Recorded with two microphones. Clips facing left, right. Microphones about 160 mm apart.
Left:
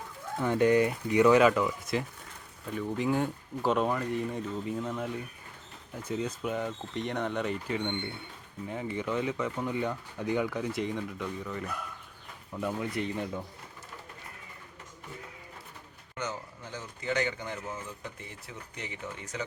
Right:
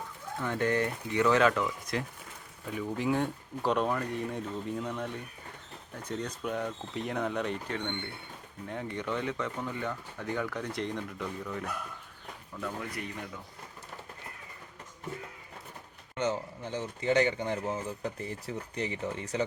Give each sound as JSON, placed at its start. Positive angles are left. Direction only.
{"t": 0.3, "sound": "speech", "side_deg": 20}
{"t": 9.8, "sound": "speech", "side_deg": 15}
{"t": 12.5, "sound": "speech", "side_deg": 20}
{"t": 16.1, "sound": "speech", "side_deg": -25}